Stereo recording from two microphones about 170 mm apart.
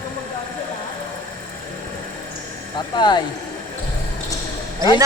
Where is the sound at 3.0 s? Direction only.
25° left (ahead or behind).